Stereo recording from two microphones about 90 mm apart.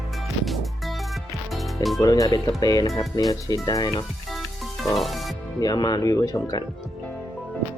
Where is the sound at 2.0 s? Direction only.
45° left (ahead or behind).